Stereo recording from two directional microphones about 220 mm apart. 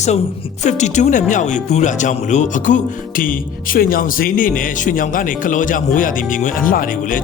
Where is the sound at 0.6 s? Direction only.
30° left (ahead or behind).